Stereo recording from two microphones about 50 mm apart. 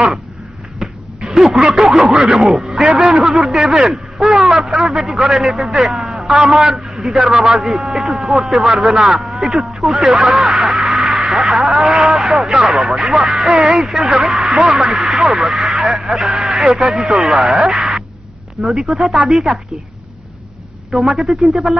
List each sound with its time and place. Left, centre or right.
0.7 s a sound: centre
2.0 s speech: right
2.5 s a man's voice: centre
3.3 s a man's voice: centre
5.9 s a sound: centre
6.2 s a man's voice: centre
11.9 s a sound: centre
12.7 s a man's voice: centre
20.9 s a man's voice: centre